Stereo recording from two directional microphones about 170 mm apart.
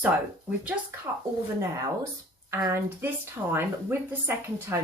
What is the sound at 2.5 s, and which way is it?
Speech, 15° right (ahead or behind).